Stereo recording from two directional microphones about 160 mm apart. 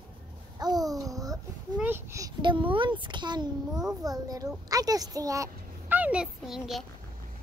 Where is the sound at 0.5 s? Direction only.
25° right (ahead or behind).